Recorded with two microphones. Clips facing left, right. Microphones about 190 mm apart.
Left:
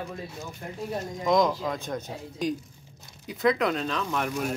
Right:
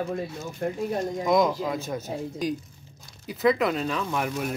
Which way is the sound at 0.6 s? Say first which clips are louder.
Right 14 dB; 55° right (ahead or behind).